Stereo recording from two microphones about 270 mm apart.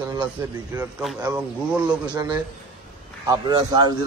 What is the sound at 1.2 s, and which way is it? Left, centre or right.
A man's voice, centre.